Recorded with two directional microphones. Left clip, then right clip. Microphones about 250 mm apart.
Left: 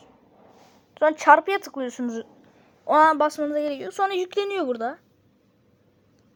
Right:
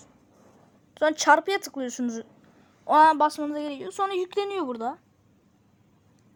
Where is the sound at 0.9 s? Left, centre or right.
Centre.